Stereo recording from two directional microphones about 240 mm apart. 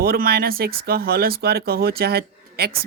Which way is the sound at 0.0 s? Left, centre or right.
Right.